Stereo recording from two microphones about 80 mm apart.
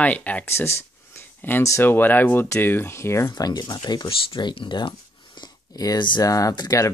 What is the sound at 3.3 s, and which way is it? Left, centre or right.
Speech, left.